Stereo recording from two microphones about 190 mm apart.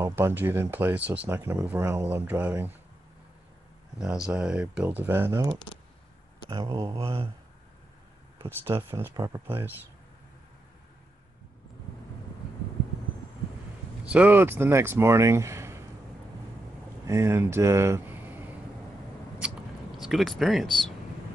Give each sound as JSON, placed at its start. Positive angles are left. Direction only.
{"t": 0.0, "sound": "speech", "side_deg": -10}
{"t": 4.0, "sound": "speech", "side_deg": -5}
{"t": 5.3, "sound": "speech", "side_deg": -20}
{"t": 8.9, "sound": "speech", "side_deg": -15}
{"t": 14.0, "sound": "speech", "side_deg": -5}
{"t": 17.0, "sound": "speech", "side_deg": -15}
{"t": 20.0, "sound": "speech", "side_deg": 0}